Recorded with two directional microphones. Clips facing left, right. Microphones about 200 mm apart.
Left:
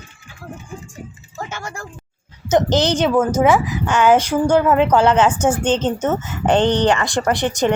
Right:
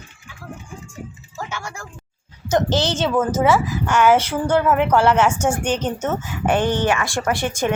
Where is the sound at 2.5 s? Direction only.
20° left (ahead or behind).